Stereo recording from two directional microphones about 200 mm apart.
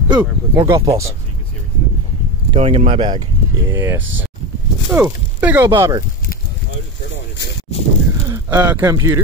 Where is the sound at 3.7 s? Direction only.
15° right (ahead or behind).